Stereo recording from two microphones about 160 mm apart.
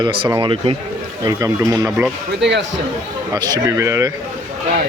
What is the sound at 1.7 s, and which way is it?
Speech, 10° right (ahead or behind).